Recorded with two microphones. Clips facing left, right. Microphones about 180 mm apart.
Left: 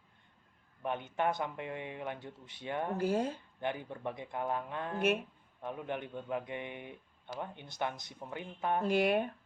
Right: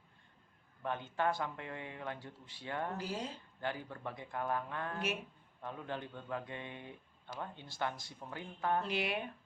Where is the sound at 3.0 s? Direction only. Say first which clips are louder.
Left 9 dB; 55° left (ahead or behind).